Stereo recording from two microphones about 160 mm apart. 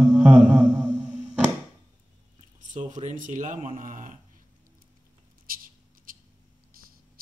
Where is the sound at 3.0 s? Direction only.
55° right (ahead or behind).